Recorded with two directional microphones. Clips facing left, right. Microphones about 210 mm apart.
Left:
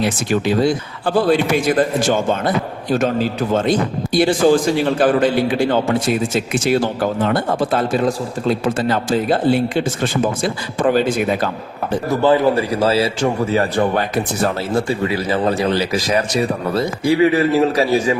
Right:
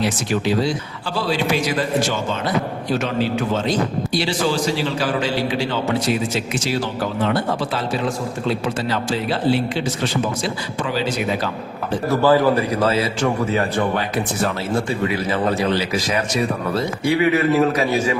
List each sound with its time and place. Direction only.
0.3 s a man's voice: 50° left (ahead or behind)
12.0 s a man's voice: 20° left (ahead or behind); by 14.0 s 35° left (ahead or behind)
17.0 s a man's voice: 35° left (ahead or behind)